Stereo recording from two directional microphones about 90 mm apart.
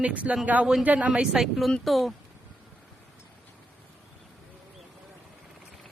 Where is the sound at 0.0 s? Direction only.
15° right (ahead or behind).